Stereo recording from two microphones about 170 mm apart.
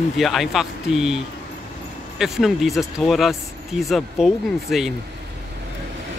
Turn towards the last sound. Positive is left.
turn(degrees=0)  # may be behind; listen again after turning